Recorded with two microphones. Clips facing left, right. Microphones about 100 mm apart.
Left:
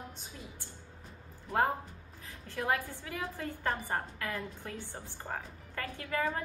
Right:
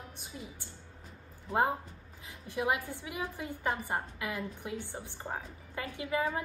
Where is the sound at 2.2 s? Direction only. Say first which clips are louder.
Right 2 dB; 15° right (ahead or behind).